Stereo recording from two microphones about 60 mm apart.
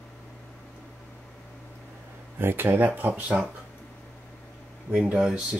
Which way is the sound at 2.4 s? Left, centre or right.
Right.